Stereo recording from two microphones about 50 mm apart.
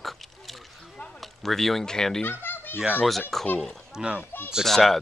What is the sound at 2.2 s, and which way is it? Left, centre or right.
Children playing, left.